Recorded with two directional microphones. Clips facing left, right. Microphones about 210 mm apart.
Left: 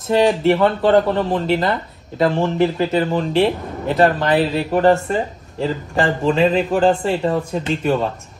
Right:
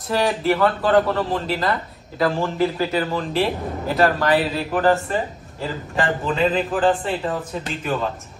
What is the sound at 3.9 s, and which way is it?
A man's voice, 25° left (ahead or behind).